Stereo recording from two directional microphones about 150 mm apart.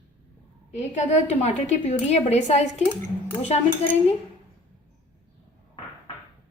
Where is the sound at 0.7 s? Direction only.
50° left (ahead or behind).